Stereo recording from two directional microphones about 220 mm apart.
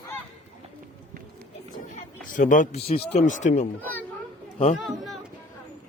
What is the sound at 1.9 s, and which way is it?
Speech, 35° left (ahead or behind).